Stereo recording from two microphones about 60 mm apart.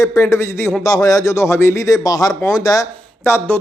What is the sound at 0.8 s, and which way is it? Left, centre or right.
A man's voice, left.